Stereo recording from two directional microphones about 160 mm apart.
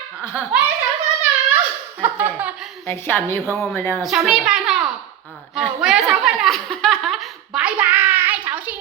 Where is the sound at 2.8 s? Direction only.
15° left (ahead or behind).